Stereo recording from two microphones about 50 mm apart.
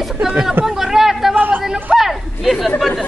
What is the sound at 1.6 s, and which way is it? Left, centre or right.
Speech, centre.